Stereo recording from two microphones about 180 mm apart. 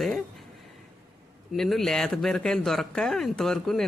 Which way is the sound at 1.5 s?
Centre (ahead or behind).